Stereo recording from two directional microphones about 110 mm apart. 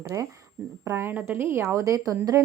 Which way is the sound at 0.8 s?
25° right (ahead or behind).